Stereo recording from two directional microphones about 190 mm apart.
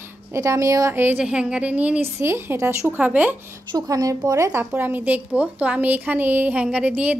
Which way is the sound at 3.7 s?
20° right (ahead or behind).